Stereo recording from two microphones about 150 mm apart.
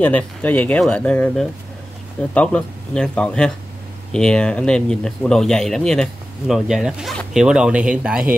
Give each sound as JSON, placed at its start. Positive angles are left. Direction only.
{"t": 0.0, "sound": "speech", "side_deg": 10}